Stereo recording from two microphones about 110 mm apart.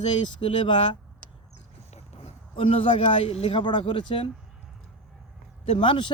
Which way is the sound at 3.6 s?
45° left (ahead or behind).